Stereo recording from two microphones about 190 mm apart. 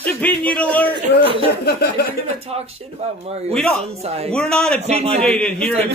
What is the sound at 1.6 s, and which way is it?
Speech, 55° left (ahead or behind).